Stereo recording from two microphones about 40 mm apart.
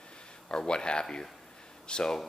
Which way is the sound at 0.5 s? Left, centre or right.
Left.